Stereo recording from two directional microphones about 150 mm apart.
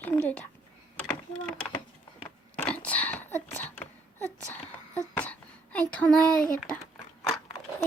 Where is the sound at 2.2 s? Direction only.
10° left (ahead or behind).